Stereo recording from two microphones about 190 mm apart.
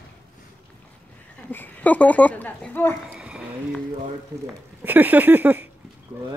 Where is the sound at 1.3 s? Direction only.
10° left (ahead or behind).